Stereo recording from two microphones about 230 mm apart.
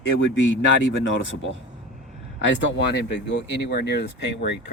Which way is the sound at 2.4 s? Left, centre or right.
Left.